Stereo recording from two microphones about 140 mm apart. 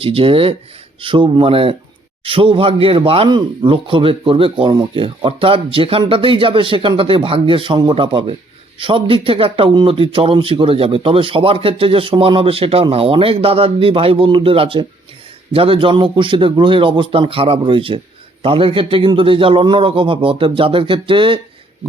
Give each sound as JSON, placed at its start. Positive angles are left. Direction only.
{"t": 0.0, "sound": "speech", "side_deg": -40}